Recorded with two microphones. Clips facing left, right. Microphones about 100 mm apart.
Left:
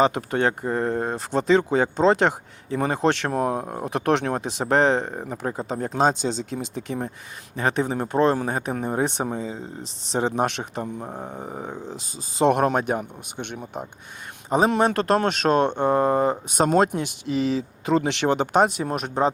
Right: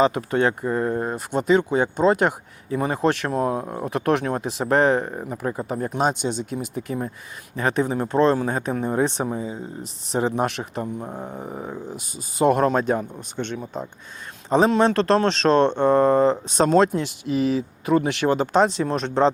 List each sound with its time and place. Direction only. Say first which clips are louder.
0.3 s speech: right 2 dB; 30° left (ahead or behind); by 19.3 s 10° left (ahead or behind)